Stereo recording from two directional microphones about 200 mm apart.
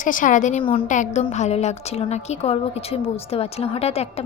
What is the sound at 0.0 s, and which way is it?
Speech, 40° left (ahead or behind).